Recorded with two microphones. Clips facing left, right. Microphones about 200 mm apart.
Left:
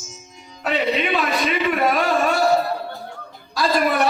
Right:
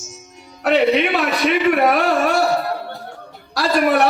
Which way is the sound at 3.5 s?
70° right (ahead or behind).